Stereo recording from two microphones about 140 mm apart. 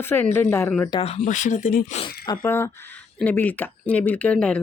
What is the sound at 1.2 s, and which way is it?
Speech, 65° left (ahead or behind).